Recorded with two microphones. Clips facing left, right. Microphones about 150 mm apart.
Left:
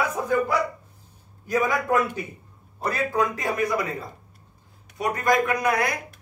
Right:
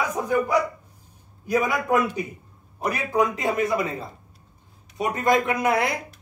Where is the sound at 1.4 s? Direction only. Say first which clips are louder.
Right 1 dB; 15° right (ahead or behind).